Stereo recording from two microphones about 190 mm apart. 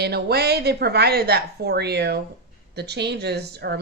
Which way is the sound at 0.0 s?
60° right (ahead or behind).